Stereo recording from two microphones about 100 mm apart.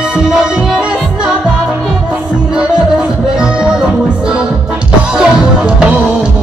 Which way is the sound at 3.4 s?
10° right (ahead or behind).